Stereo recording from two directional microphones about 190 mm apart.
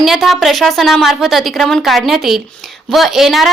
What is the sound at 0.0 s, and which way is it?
A woman's voice, centre (ahead or behind).